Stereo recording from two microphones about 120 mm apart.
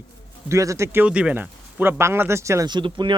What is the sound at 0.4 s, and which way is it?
Speech, 25° right (ahead or behind).